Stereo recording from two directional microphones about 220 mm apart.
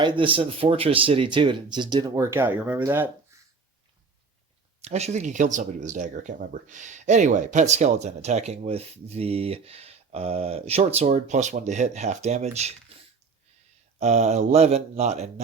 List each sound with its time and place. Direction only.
0.0 s speech: 25° right (ahead or behind)
4.8 s speech: 30° right (ahead or behind)
14.0 s speech: 30° right (ahead or behind)